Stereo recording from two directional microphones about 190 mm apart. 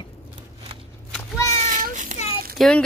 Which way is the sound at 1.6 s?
40° right (ahead or behind).